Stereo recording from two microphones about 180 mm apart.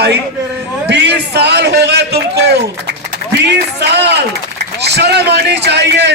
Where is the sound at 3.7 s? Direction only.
70° right (ahead or behind).